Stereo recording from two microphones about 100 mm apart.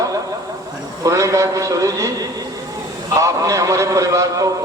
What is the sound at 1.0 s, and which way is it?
A man's voice, 35° right (ahead or behind).